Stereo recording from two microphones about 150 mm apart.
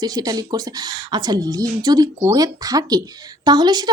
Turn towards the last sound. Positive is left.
turn(degrees=-30)  # may be behind; listen again after turning